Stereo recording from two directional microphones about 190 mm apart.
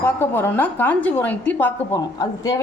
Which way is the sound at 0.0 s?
10° left (ahead or behind).